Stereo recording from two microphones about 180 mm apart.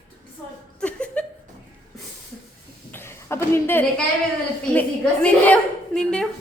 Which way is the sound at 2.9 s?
15° left (ahead or behind).